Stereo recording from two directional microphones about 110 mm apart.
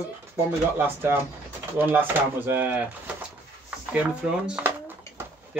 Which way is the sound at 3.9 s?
10° right (ahead or behind).